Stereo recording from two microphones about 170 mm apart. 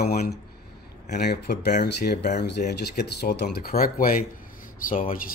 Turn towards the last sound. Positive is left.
turn(degrees=55)  # may be behind; listen again after turning